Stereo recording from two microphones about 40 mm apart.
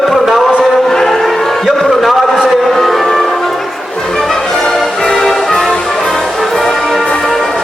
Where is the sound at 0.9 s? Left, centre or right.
Centre.